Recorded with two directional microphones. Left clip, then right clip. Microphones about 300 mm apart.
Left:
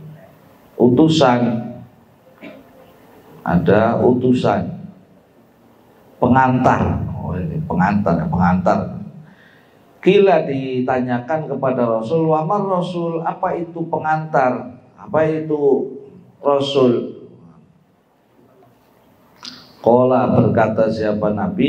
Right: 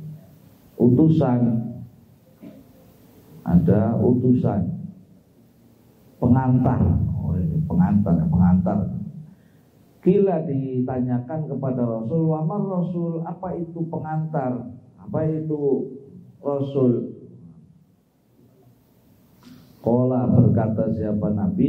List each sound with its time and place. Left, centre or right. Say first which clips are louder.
0.9 s a man's voice: left 9 dB; centre
3.4 s a man's voice: left 8 dB; centre
6.1 s a man's voice: left 8 dB; centre
15.6 s a man's voice: left 7 dB; left
16.4 s a man's voice: left 8 dB; centre
19.9 s a man's voice: left 9 dB; centre